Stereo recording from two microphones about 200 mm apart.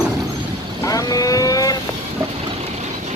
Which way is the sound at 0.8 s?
15° left (ahead or behind).